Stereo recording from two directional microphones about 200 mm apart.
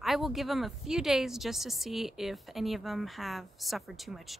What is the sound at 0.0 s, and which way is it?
Speech, centre (ahead or behind).